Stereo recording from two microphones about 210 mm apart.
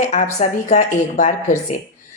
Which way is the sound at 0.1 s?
35° left (ahead or behind).